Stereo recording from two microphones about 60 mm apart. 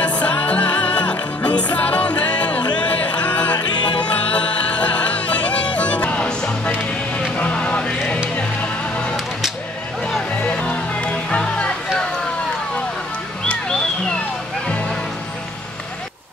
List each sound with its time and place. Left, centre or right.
0.0 s music: left
10.4 s music: left
14.7 s music: left